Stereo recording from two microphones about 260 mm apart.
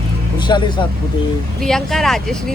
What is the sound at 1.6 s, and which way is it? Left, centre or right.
Speech, centre.